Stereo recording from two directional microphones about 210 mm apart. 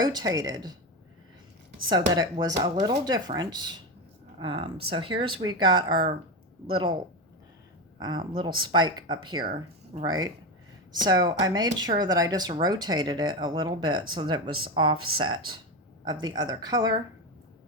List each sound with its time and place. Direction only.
0.0 s speech: 20° right (ahead or behind)
1.9 s speech: 20° right (ahead or behind)
7.9 s speech: 20° right (ahead or behind)
9.4 s speech: 40° right (ahead or behind)
10.0 s speech: 20° right (ahead or behind)
14.9 s speech: 90° right
15.2 s speech: 20° right (ahead or behind)